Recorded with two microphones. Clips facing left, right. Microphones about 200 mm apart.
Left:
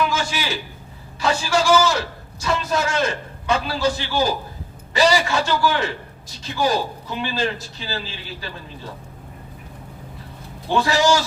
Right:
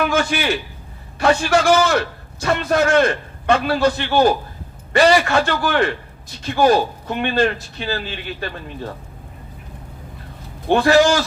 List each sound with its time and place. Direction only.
0.0 s a sound: 60° right (ahead or behind)
1.2 s a man's voice: 60° right (ahead or behind)
10.7 s a man's voice: 60° right (ahead or behind)